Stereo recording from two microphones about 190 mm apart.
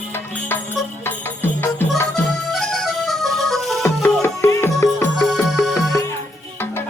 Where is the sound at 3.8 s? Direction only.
15° left (ahead or behind).